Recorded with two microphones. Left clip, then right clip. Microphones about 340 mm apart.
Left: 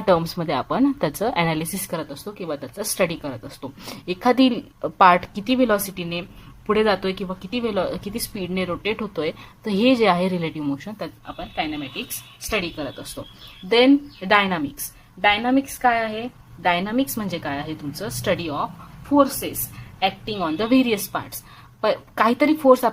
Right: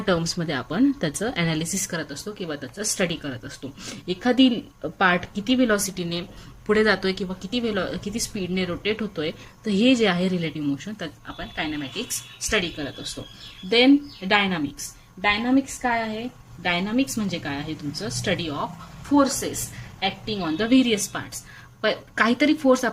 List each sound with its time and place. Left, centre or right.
0.0 s a woman's voice: centre